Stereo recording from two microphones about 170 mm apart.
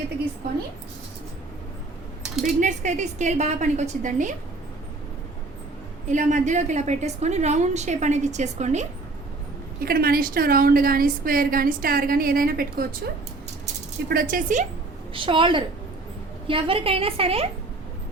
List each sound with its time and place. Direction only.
2.4 s a woman's voice: 45° right (ahead or behind)
6.1 s a woman's voice: 45° right (ahead or behind)
9.8 s a woman's voice: 60° right (ahead or behind)
14.1 s a woman's voice: 55° right (ahead or behind)
15.1 s a woman's voice: 30° right (ahead or behind)